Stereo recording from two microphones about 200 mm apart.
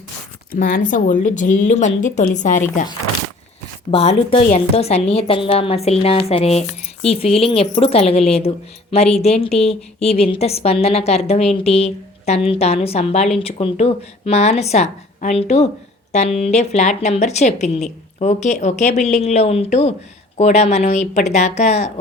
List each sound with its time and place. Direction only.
0.5 s a woman's voice: 45° left (ahead or behind)
3.9 s a woman's voice: 25° left (ahead or behind)